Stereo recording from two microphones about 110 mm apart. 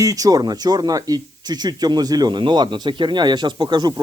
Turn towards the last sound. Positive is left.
turn(degrees=-40)  # may be behind; listen again after turning